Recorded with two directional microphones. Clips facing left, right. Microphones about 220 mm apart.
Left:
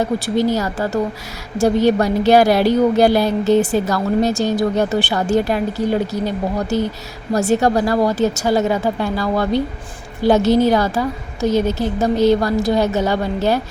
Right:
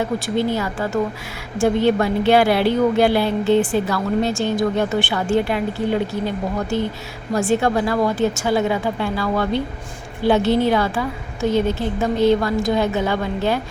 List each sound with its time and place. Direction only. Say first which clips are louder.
0.3 s a woman's voice: left 3 dB; 40° left (ahead or behind)